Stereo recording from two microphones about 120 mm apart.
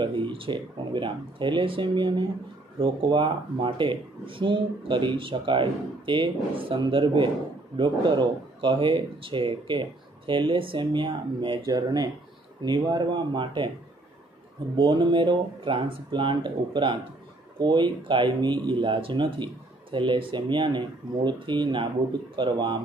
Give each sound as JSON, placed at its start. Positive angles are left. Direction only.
{"t": 0.0, "sound": "speech", "side_deg": -45}
{"t": 11.6, "sound": "speech", "side_deg": -30}
{"t": 14.8, "sound": "speech", "side_deg": -40}